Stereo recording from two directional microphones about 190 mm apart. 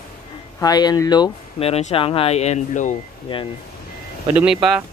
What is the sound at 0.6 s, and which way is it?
Speech, 20° left (ahead or behind).